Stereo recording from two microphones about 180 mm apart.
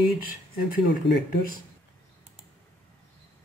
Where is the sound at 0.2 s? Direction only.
55° left (ahead or behind).